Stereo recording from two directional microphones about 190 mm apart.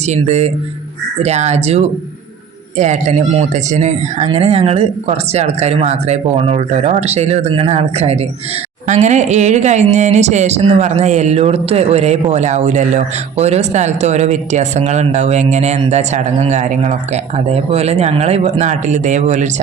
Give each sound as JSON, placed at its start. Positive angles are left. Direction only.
{"t": 0.1, "sound": "speech", "side_deg": -35}